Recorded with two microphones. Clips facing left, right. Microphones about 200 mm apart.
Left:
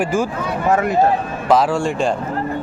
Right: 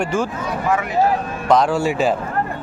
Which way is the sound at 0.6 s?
45° left (ahead or behind).